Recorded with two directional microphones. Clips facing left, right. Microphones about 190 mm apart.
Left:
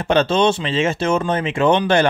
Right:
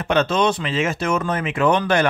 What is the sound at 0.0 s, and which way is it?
Speech, 30° left (ahead or behind).